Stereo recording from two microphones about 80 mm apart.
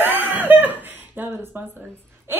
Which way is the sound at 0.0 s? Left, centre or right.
Right.